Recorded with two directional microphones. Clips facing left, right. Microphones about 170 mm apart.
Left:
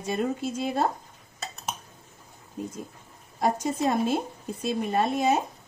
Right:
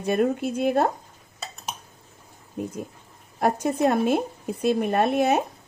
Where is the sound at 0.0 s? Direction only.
60° right (ahead or behind).